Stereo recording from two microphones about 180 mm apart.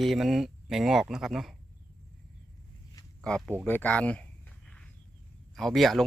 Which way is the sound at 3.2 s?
Centre (ahead or behind).